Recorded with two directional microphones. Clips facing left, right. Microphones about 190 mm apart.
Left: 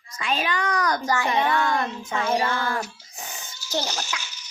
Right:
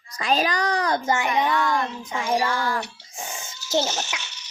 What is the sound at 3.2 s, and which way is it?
Music, 25° right (ahead or behind).